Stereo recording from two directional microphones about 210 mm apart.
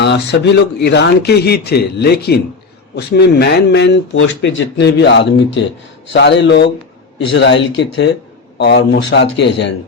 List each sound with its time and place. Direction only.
0.0 s speech: 55° left (ahead or behind)